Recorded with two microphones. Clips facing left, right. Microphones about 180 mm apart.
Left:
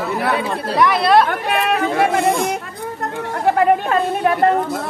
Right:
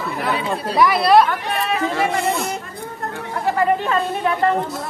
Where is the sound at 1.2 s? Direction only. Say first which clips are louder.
Left 3 dB; 60° left (ahead or behind).